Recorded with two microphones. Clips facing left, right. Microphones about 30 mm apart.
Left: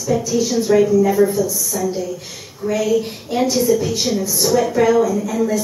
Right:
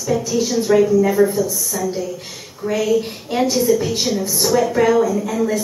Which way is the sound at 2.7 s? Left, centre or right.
Centre.